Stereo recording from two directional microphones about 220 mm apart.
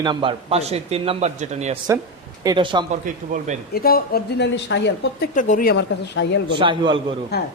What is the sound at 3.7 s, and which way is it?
Speech, 45° left (ahead or behind).